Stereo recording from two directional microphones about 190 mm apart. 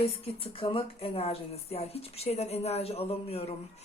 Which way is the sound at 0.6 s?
30° left (ahead or behind).